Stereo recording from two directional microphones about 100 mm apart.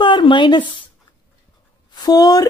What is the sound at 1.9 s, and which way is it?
Speech, 40° left (ahead or behind).